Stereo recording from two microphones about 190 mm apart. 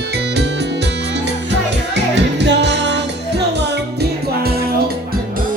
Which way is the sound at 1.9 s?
65° right (ahead or behind).